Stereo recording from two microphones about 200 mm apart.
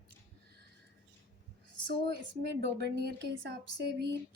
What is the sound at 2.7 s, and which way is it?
A woman's voice, 55° right (ahead or behind).